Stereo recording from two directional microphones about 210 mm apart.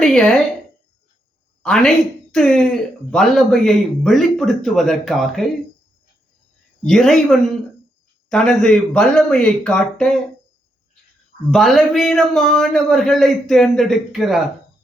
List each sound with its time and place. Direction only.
0.0 s speech: 5° left (ahead or behind)
1.6 s a woman's voice: 5° left (ahead or behind)
6.8 s speech: centre (ahead or behind)
11.5 s speech: centre (ahead or behind)